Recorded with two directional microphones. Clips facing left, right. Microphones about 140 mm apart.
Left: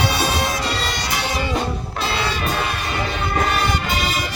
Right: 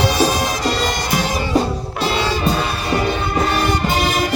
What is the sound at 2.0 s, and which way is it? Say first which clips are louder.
Music: right 5 dB; 30° right (ahead or behind).